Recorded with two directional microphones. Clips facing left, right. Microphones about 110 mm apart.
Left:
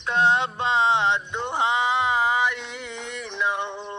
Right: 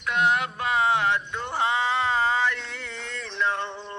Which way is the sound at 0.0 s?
30° left (ahead or behind).